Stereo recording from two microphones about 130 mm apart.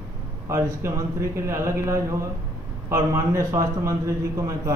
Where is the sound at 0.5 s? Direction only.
20° right (ahead or behind).